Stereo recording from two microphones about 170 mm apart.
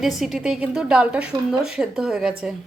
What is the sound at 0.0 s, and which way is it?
Speech, centre (ahead or behind).